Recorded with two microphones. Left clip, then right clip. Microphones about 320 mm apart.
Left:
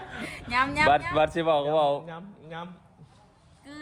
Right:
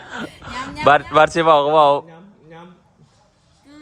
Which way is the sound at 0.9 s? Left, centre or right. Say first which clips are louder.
Right 15 dB; right.